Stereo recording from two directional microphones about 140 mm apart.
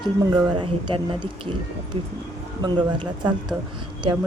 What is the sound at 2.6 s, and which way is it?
Speech, 30° right (ahead or behind).